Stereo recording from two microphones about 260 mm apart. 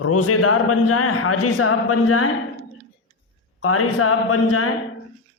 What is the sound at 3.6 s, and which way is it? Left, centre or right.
A man's voice, left.